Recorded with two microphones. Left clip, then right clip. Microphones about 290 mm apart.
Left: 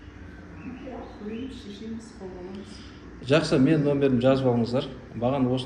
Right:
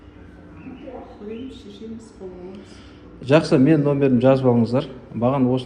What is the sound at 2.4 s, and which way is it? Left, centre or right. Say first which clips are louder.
A man's voice: right 2 dB; centre.